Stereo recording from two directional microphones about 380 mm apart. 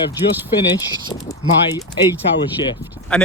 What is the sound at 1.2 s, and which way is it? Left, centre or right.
Speech, centre.